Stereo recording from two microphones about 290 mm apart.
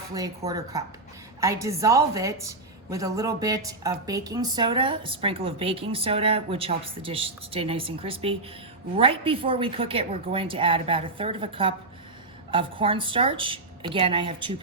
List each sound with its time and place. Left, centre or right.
0.1 s a woman's voice: centre